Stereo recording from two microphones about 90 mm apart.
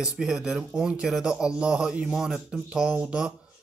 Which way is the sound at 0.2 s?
10° right (ahead or behind).